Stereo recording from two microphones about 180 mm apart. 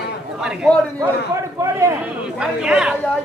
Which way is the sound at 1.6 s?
15° right (ahead or behind).